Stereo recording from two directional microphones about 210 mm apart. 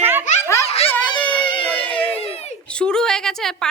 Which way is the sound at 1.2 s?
5° left (ahead or behind).